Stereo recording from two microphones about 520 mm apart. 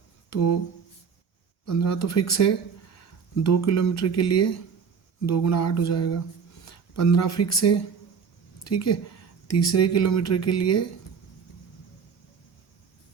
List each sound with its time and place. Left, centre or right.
0.3 s speech: left
1.6 s speech: left